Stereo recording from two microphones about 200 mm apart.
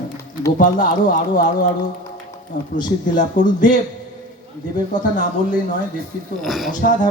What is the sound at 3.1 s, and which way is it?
Speech, 40° left (ahead or behind).